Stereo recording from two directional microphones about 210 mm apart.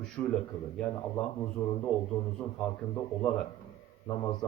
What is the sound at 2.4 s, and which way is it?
Speech, 10° left (ahead or behind).